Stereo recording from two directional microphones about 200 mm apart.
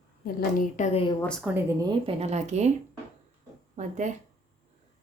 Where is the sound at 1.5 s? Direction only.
5° right (ahead or behind).